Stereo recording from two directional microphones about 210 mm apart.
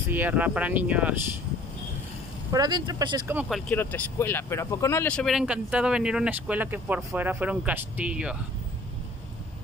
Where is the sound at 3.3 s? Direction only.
5° right (ahead or behind).